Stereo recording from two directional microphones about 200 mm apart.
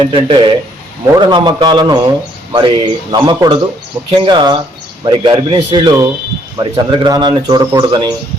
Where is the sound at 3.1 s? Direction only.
20° right (ahead or behind).